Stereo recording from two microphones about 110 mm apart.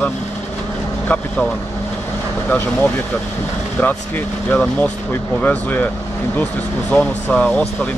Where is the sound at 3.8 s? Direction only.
15° left (ahead or behind).